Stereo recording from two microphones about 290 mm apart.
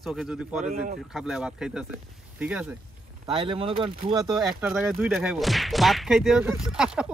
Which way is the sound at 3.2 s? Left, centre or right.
Centre.